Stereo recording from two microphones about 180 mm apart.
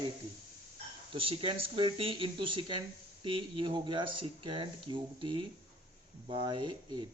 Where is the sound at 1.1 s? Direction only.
30° right (ahead or behind).